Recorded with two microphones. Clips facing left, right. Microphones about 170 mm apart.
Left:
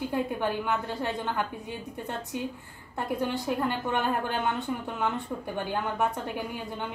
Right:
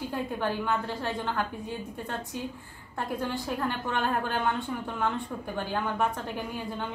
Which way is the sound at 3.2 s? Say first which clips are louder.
Left 3 dB; 15° left (ahead or behind).